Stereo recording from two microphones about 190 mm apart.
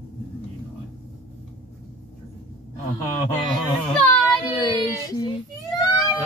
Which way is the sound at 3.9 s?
5° left (ahead or behind).